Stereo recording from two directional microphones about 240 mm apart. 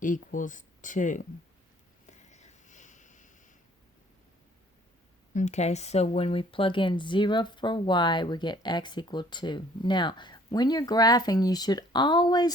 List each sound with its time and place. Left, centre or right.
0.0 s speech: left
2.0 s a sound: left
5.3 s speech: left